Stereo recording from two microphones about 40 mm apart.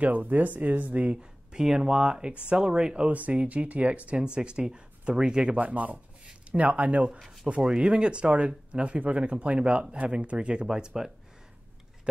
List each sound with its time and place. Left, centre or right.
0.0 s speech: right
1.1 s speech: centre
3.1 s speech: right
5.6 s speech: right